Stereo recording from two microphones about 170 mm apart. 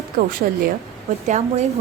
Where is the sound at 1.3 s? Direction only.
40° right (ahead or behind).